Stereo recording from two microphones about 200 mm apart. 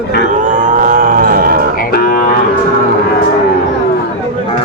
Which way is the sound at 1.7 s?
45° left (ahead or behind).